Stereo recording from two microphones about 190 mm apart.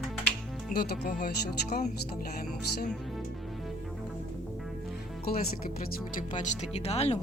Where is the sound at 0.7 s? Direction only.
55° left (ahead or behind).